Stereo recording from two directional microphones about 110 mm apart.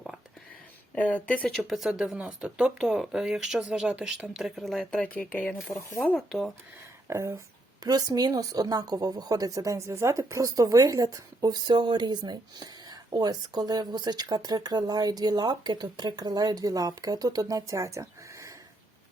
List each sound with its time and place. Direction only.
0.9 s speech: 15° left (ahead or behind)
1.5 s speech: centre (ahead or behind)
6.1 s speech: centre (ahead or behind)
7.1 s speech: 25° right (ahead or behind)